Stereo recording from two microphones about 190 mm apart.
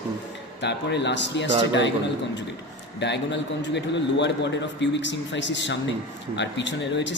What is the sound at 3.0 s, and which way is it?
A man's voice, 65° left (ahead or behind).